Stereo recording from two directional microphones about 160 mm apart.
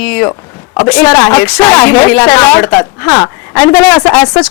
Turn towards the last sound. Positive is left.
turn(degrees=5)  # may be behind; listen again after turning